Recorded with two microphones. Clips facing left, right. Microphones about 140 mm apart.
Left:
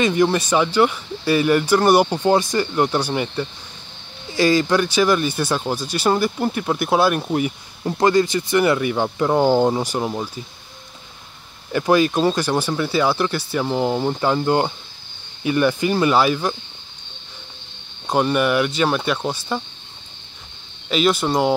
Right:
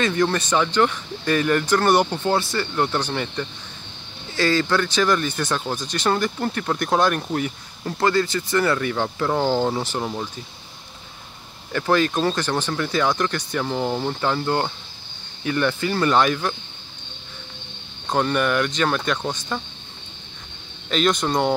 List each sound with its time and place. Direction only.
0.0 s speech: 15° left (ahead or behind)
11.7 s speech: 15° left (ahead or behind)
18.0 s speech: 10° left (ahead or behind)
20.9 s speech: 5° left (ahead or behind)